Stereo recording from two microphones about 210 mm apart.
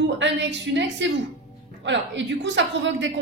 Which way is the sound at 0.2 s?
60° right (ahead or behind).